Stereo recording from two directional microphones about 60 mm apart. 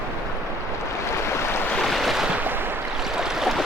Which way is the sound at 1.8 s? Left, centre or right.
Centre.